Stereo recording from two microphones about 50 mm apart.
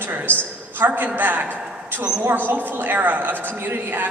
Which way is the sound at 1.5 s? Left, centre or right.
Right.